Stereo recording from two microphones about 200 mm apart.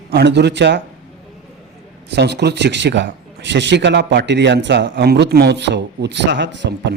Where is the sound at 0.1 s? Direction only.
55° right (ahead or behind).